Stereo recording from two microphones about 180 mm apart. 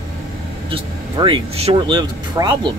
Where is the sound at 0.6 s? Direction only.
30° right (ahead or behind).